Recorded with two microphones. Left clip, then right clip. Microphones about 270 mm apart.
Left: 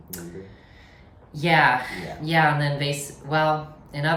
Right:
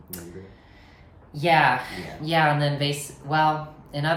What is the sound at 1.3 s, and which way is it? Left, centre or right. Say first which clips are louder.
A woman's voice: even; centre.